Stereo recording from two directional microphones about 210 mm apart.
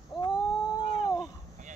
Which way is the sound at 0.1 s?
20° left (ahead or behind).